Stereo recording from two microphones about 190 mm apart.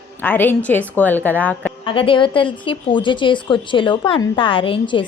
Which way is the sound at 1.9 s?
25° left (ahead or behind).